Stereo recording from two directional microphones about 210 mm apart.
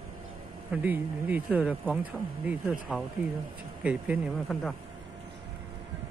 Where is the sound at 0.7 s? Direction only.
10° right (ahead or behind).